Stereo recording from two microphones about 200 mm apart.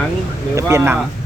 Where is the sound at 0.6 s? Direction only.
15° right (ahead or behind).